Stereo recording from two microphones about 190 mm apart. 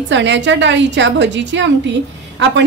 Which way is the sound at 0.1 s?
70° right (ahead or behind).